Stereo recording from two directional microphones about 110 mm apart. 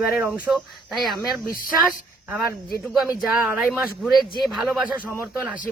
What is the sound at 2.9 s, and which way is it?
Speech, 5° right (ahead or behind).